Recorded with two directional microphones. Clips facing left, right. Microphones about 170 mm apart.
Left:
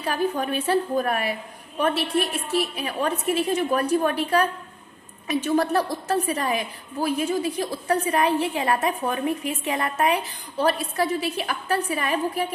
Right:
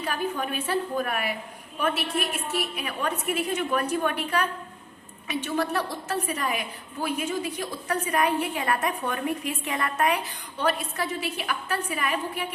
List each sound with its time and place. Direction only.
0.1 s a woman's voice: 40° left (ahead or behind)